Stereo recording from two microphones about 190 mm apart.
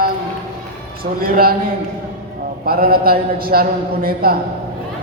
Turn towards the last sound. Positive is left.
turn(degrees=-50)  # may be behind; listen again after turning